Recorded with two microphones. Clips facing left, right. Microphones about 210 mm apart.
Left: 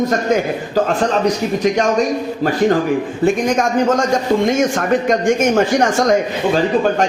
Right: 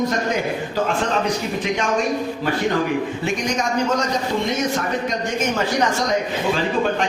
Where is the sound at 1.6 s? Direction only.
45° left (ahead or behind).